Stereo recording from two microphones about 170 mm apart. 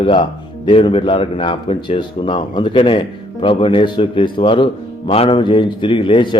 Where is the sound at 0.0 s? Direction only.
30° left (ahead or behind).